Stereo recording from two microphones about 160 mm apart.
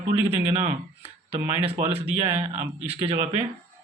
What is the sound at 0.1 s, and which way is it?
Speech, 40° right (ahead or behind).